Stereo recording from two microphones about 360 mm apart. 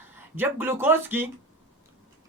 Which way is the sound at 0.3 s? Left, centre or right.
Centre.